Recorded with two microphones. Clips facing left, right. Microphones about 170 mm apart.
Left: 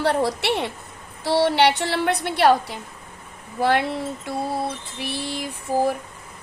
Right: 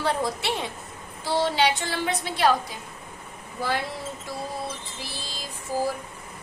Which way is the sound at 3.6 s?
65° left (ahead or behind).